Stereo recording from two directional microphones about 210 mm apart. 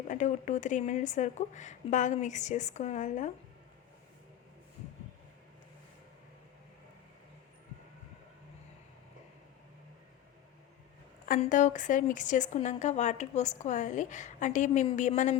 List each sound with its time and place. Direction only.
0.1 s a woman's voice: 35° left (ahead or behind)
11.3 s a woman's voice: 35° left (ahead or behind)